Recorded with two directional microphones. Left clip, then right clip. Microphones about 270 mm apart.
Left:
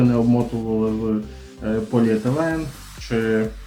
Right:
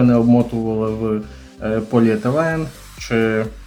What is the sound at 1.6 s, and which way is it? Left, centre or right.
Speech, right.